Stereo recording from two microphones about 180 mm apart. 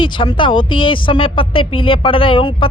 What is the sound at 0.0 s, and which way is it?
Speech, 25° left (ahead or behind).